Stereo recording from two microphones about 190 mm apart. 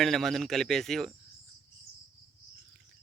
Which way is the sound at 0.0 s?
Centre (ahead or behind).